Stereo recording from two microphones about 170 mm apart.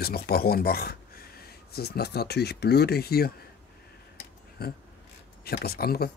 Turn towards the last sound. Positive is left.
turn(degrees=65)  # may be behind; listen again after turning